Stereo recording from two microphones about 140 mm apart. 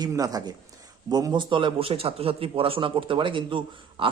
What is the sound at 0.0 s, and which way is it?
A man's voice, 25° right (ahead or behind).